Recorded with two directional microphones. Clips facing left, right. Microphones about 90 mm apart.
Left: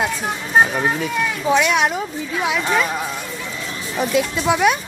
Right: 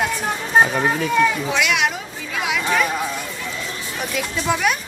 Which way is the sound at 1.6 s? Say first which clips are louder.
Left 3 dB; 35° left (ahead or behind).